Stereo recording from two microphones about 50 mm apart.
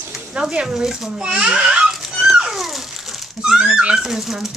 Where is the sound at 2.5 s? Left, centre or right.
Centre.